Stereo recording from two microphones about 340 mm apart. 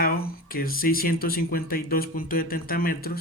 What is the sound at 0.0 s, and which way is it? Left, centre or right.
Speech, left.